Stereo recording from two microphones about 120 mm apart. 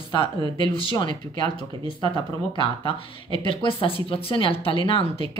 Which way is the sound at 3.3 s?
45° left (ahead or behind).